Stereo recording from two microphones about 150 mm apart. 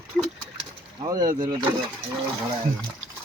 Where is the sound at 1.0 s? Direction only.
25° right (ahead or behind).